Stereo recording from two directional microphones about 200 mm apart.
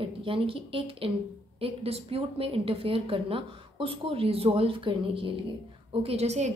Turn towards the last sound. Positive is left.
turn(degrees=-35)  # may be behind; listen again after turning